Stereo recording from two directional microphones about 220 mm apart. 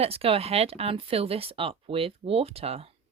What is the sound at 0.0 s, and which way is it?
Speech, 25° right (ahead or behind).